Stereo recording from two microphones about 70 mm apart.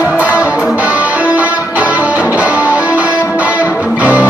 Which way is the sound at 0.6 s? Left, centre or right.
Right.